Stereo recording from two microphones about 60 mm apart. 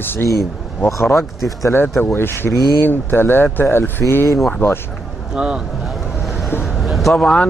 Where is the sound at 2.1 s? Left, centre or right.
Left.